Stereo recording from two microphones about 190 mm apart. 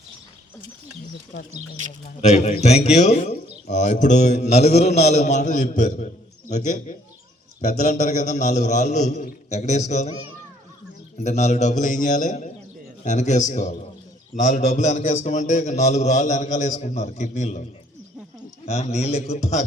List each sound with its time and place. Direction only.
1.8 s speech: 40° right (ahead or behind)
2.2 s a man's voice: 35° left (ahead or behind)
11.2 s a man's voice: 35° left (ahead or behind)
18.6 s a man's voice: 35° left (ahead or behind)